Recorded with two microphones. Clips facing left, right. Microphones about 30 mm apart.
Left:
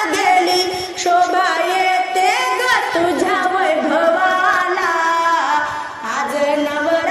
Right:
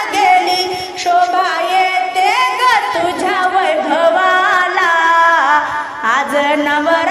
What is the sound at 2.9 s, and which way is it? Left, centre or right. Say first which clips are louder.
Music: even; right.